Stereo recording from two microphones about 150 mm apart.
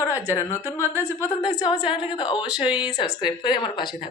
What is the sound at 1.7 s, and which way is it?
Speech, 5° right (ahead or behind).